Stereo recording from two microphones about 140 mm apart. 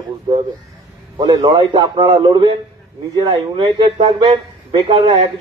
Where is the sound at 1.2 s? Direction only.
30° right (ahead or behind).